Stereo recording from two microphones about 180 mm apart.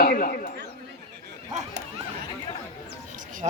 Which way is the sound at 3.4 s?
35° right (ahead or behind).